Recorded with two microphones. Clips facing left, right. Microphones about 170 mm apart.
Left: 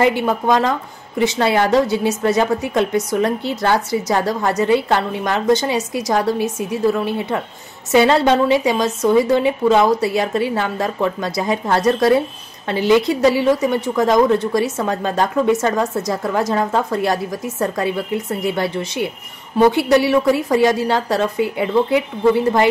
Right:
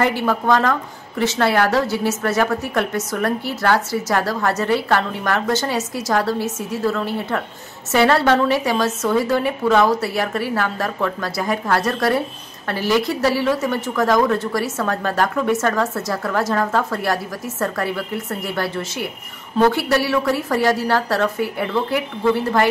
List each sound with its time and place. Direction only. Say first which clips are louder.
0.0 s a woman's voice: left 3 dB; 20° left (ahead or behind)